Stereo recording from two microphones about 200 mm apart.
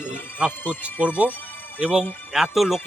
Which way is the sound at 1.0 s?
5° right (ahead or behind).